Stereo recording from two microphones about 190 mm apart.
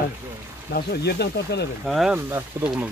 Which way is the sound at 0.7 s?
60° left (ahead or behind).